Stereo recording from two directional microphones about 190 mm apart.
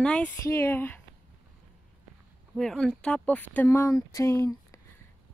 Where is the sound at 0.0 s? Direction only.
5° left (ahead or behind).